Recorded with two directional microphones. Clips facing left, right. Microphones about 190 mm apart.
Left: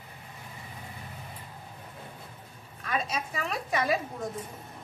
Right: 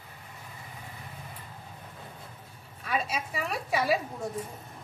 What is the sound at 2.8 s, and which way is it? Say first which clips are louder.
A woman's voice: even; 5° right (ahead or behind).